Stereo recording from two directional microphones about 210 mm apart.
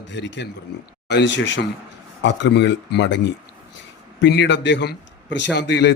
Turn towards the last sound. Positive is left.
turn(degrees=55)  # may be behind; listen again after turning